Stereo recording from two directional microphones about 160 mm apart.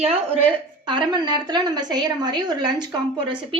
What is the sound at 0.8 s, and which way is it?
A woman's voice, 30° right (ahead or behind).